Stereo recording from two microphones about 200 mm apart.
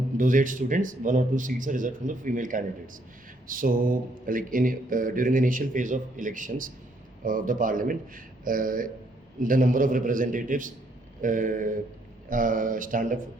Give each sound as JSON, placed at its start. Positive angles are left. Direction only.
{"t": 0.2, "sound": "speech", "side_deg": -40}